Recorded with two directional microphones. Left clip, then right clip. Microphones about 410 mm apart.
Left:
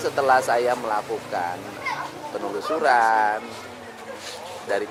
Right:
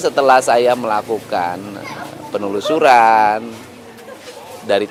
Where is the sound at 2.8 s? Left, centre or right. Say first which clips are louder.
Right 9 dB; right.